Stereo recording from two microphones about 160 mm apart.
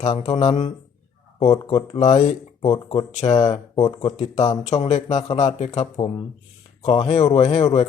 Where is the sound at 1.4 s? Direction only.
30° left (ahead or behind); by 3.4 s 45° left (ahead or behind).